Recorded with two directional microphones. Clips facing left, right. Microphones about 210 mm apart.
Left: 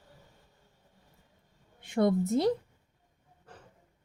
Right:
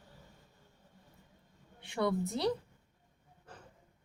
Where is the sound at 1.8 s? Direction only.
45° left (ahead or behind).